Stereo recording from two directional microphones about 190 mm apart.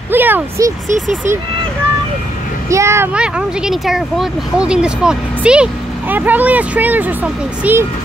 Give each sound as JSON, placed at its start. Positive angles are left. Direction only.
{"t": 0.1, "sound": "speech", "side_deg": -10}
{"t": 0.8, "sound": "speech", "side_deg": -40}
{"t": 2.7, "sound": "speech", "side_deg": -15}